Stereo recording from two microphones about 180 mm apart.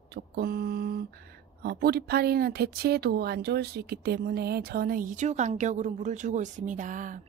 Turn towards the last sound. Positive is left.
turn(degrees=-45)  # may be behind; listen again after turning